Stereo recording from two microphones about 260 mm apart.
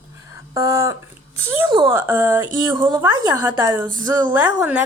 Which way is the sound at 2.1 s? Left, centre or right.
Centre.